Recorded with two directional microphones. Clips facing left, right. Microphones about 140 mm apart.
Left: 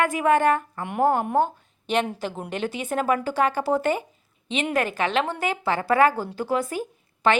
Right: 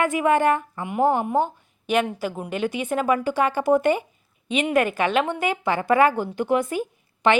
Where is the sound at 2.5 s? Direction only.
15° right (ahead or behind).